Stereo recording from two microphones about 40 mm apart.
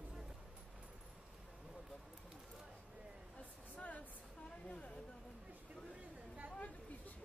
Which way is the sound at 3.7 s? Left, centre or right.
Left.